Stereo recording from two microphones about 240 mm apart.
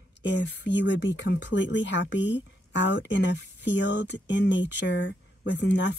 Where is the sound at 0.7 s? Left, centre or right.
Left.